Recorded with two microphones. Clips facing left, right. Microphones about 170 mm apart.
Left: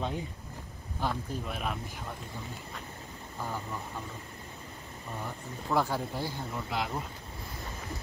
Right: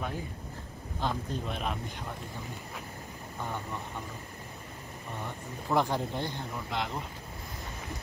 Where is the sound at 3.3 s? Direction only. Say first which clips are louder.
Even; centre (ahead or behind).